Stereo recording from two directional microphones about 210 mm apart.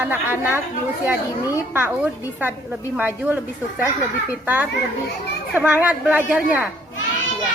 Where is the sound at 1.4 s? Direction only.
15° left (ahead or behind).